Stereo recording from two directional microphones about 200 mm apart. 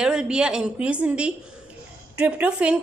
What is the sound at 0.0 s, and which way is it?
A woman's voice, 5° right (ahead or behind).